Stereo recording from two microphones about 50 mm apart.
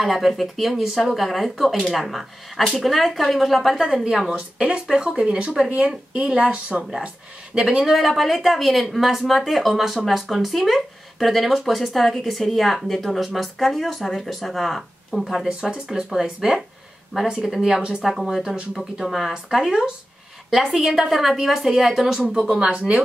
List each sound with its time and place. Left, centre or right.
0.0 s speech: centre
3.8 s speech: centre
15.6 s speech: centre
22.5 s speech: right